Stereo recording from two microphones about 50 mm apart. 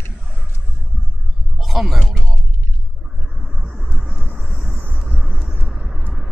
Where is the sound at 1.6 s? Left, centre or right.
Centre.